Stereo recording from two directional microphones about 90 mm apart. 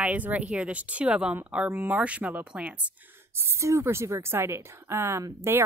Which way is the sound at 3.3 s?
30° right (ahead or behind).